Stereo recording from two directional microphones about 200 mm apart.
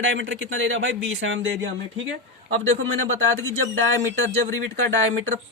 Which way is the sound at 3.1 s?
90° right.